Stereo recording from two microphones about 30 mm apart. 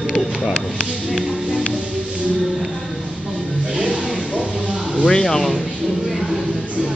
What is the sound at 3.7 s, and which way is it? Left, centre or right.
Music, right.